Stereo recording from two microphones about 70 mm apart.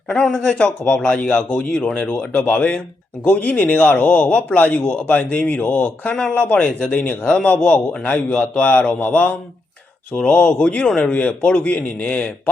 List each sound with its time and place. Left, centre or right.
0.4 s speech: centre
7.3 s speech: centre